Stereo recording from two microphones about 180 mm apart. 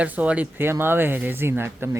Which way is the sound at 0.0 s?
10° right (ahead or behind).